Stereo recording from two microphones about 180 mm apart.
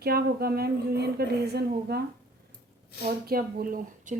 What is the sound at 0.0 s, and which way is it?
A woman's voice, 60° right (ahead or behind).